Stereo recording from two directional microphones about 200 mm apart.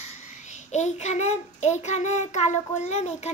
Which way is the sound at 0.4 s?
35° left (ahead or behind).